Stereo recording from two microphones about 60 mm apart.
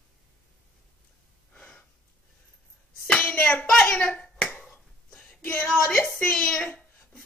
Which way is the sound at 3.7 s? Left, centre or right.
Centre.